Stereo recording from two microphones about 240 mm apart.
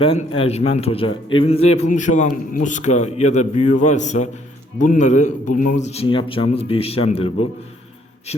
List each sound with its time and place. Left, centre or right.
0.0 s a man's voice: left